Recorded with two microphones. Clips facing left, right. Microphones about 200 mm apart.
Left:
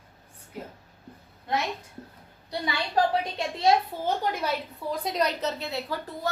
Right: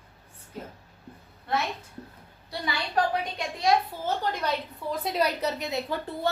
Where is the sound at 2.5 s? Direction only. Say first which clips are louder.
Left 2 dB; 25° left (ahead or behind).